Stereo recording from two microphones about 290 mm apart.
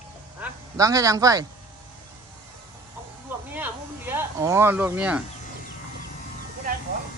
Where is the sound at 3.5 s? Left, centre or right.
Centre.